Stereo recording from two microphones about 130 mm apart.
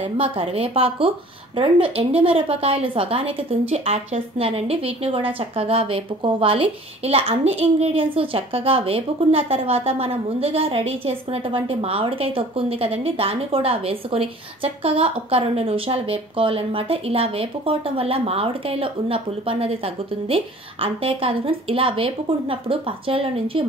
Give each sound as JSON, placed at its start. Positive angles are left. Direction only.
{"t": 0.2, "sound": "a woman's voice", "side_deg": -45}